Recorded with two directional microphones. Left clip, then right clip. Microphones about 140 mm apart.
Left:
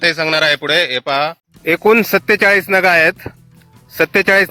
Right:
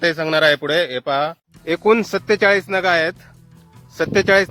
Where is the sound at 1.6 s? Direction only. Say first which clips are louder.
Left 4 dB; 40° left (ahead or behind).